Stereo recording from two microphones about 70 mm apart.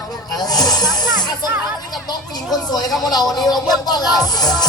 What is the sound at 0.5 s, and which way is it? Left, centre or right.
Snake, left.